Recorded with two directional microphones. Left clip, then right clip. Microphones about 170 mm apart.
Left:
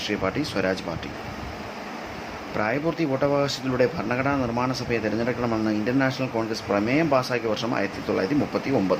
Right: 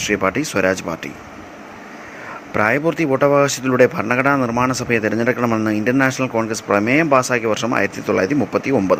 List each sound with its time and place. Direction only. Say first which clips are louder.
0.1 s speech: right 9 dB; 45° right (ahead or behind)
2.6 s speech: right 8 dB; 50° right (ahead or behind)